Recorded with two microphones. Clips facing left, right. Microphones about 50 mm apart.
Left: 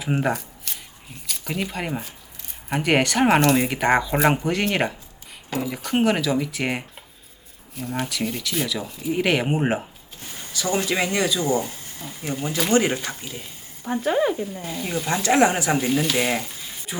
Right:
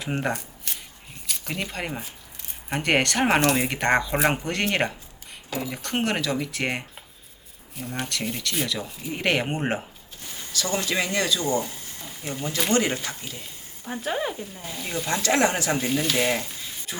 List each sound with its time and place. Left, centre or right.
0.0 s a sound: centre
1.3 s speech: centre
10.5 s speech: centre
14.0 s speech: centre
15.8 s speech: centre